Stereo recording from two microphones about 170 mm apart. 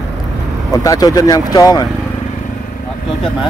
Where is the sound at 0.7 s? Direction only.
20° left (ahead or behind).